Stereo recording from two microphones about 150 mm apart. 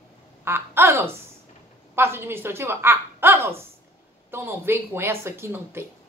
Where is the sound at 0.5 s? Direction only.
15° right (ahead or behind).